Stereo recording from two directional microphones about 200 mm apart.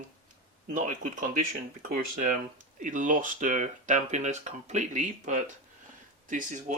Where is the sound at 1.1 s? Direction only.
40° right (ahead or behind).